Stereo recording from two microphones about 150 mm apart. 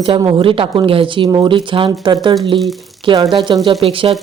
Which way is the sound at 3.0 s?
35° right (ahead or behind).